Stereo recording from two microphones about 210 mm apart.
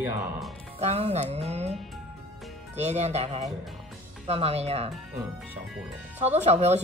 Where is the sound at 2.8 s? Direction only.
30° right (ahead or behind).